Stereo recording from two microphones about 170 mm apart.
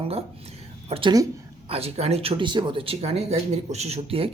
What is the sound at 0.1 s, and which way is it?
A woman's voice, 35° right (ahead or behind).